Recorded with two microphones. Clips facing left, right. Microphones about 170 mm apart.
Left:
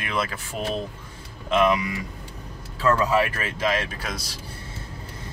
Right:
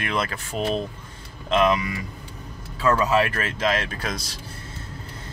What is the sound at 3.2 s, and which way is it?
Speech, 10° left (ahead or behind).